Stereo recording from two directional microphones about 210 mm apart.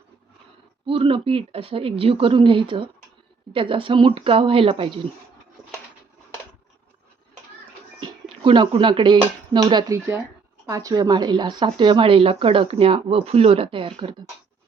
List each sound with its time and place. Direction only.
0.9 s speech: 25° right (ahead or behind)
8.0 s speech: 20° right (ahead or behind)